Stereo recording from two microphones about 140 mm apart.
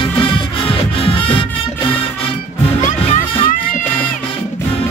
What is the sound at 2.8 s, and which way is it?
Music, 60° left (ahead or behind).